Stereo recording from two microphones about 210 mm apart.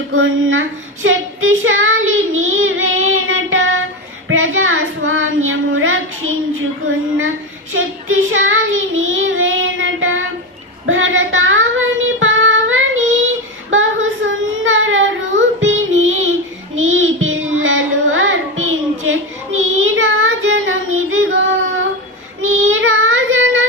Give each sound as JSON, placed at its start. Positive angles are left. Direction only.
{"t": 0.1, "sound": "a woman's voice", "side_deg": -70}
{"t": 1.0, "sound": "child singing", "side_deg": -70}
{"t": 7.7, "sound": "child singing", "side_deg": -70}
{"t": 22.4, "sound": "child singing", "side_deg": -70}